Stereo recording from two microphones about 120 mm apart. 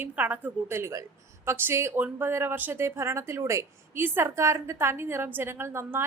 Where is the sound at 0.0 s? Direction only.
15° right (ahead or behind).